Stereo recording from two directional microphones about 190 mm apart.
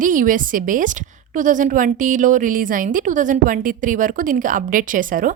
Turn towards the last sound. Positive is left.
turn(degrees=-45)  # may be behind; listen again after turning